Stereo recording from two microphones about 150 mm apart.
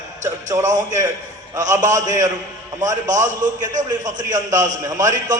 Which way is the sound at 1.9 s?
55° right (ahead or behind).